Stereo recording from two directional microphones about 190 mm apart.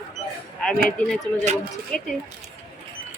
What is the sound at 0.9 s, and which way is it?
Speech, 5° left (ahead or behind).